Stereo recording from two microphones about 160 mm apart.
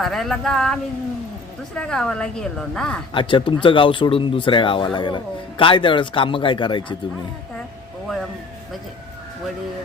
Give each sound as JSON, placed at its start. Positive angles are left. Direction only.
{"t": 0.0, "sound": "a woman's voice", "side_deg": 0}
{"t": 3.1, "sound": "speech", "side_deg": 30}